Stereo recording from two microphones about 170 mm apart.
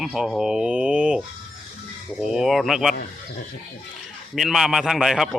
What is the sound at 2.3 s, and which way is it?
Speech, centre (ahead or behind).